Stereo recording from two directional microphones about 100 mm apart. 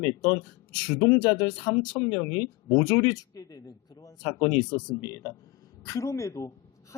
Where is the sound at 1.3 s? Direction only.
45° left (ahead or behind).